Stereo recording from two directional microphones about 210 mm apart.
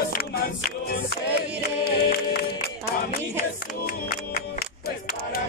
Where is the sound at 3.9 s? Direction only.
50° left (ahead or behind).